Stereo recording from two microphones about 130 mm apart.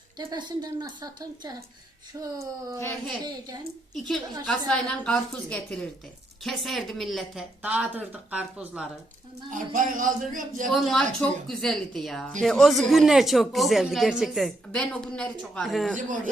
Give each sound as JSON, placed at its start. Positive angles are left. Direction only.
{"t": 0.2, "sound": "a woman's voice", "side_deg": -35}
{"t": 4.4, "sound": "a woman's voice", "side_deg": 5}
{"t": 7.6, "sound": "speech", "side_deg": -10}
{"t": 9.5, "sound": "speech", "side_deg": -90}
{"t": 10.7, "sound": "speech", "side_deg": 0}
{"t": 16.0, "sound": "speech", "side_deg": -90}